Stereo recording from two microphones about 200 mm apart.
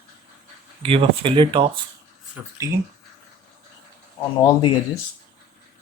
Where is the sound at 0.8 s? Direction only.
30° right (ahead or behind).